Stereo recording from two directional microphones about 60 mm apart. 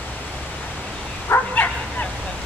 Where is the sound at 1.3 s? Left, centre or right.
Left.